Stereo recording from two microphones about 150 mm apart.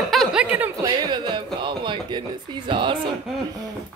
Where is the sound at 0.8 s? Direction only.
30° right (ahead or behind).